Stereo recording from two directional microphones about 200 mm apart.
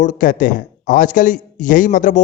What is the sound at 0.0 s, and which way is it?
A man's voice, 40° left (ahead or behind).